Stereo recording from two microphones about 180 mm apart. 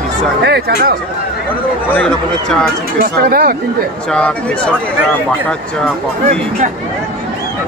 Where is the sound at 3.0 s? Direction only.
55° right (ahead or behind).